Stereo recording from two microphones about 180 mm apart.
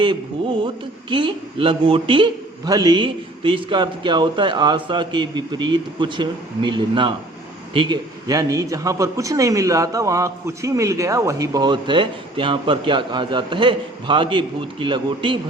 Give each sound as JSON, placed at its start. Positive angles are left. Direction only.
{"t": 1.1, "sound": "speech", "side_deg": -30}